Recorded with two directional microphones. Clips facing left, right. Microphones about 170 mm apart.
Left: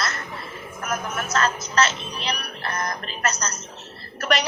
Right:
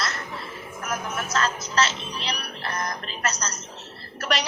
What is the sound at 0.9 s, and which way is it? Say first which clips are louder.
A woman's voice: left 2 dB; 55° left (ahead or behind).